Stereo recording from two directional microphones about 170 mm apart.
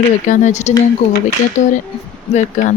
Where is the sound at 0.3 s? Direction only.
45° left (ahead or behind).